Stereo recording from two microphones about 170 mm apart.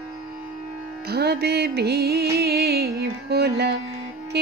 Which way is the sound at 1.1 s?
70° right (ahead or behind).